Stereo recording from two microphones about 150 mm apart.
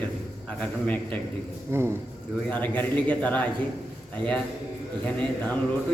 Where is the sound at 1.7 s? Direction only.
15° right (ahead or behind).